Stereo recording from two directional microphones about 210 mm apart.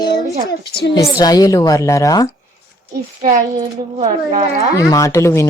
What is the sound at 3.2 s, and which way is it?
A woman's voice, 40° right (ahead or behind).